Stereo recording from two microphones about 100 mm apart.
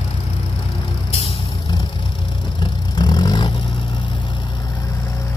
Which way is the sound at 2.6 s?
40° left (ahead or behind).